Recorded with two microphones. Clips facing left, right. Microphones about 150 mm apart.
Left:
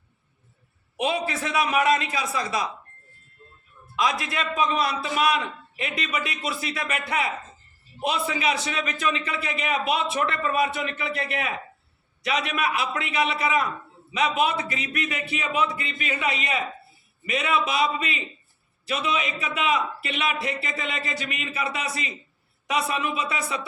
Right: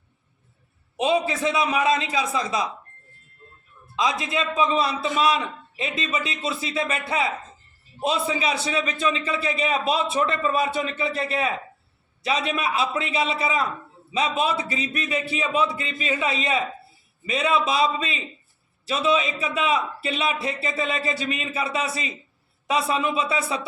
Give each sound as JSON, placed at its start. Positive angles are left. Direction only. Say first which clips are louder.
{"t": 0.9, "sound": "a man's voice", "louder": "right 4 dB", "side_deg": -25}
{"t": 3.9, "sound": "a man's voice", "louder": "right 1 dB", "side_deg": -20}